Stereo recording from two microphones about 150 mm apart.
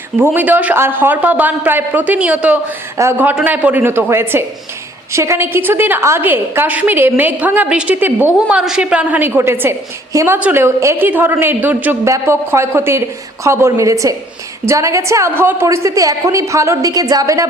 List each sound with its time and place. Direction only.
0.2 s a woman's voice: 10° right (ahead or behind)